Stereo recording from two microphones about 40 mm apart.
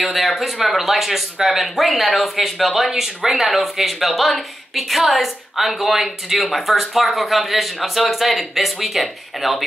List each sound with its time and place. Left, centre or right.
0.0 s a woman's voice: centre